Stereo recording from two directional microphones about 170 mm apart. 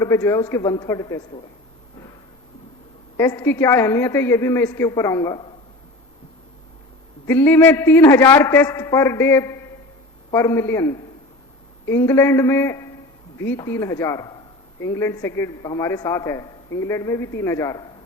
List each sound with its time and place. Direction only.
0.0 s a man's voice: 15° left (ahead or behind)
3.2 s a man's voice: 15° left (ahead or behind)
7.3 s a man's voice: 10° left (ahead or behind)